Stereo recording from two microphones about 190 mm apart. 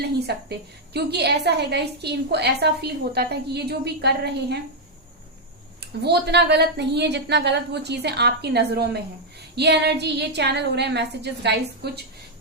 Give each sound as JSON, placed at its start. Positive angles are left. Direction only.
{"t": 0.3, "sound": "a woman's voice", "side_deg": -60}
{"t": 6.0, "sound": "a woman's voice", "side_deg": -60}